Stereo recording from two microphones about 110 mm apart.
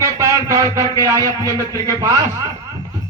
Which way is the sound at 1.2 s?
30° left (ahead or behind).